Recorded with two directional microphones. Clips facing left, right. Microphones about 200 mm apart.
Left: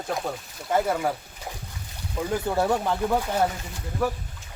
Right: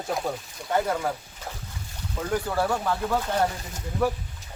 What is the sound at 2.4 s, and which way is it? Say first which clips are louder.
Speech: left 5 dB; 20° left (ahead or behind).